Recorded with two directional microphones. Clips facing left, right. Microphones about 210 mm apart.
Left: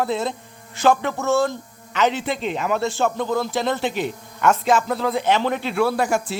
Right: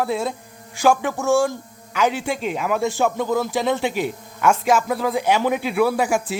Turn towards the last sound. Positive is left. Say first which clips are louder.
# right 1 dB
turn(degrees=-10)  # may be behind; listen again after turning